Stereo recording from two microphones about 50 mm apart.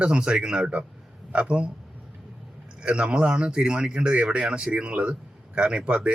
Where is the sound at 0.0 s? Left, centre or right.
Centre.